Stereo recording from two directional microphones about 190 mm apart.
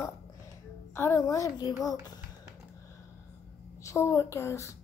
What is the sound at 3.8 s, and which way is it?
Speech, 15° left (ahead or behind).